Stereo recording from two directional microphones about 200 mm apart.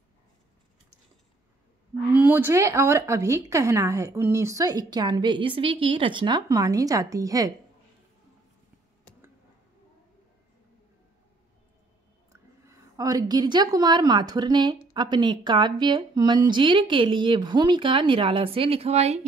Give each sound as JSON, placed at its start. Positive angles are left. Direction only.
{"t": 2.1, "sound": "a woman's voice", "side_deg": -10}
{"t": 12.3, "sound": "a woman's voice", "side_deg": -15}